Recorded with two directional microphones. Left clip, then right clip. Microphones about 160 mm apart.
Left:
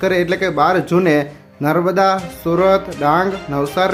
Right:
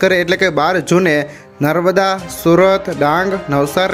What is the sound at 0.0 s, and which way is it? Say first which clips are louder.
A man's voice: right 4 dB; 25° right (ahead or behind).